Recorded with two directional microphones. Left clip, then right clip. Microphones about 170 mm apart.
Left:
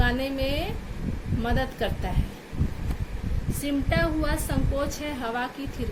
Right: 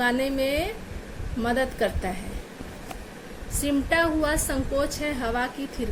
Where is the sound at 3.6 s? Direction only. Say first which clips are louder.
Right 3 dB; 30° right (ahead or behind).